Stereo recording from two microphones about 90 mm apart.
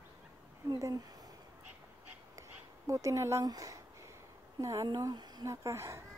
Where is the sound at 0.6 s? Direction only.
45° right (ahead or behind).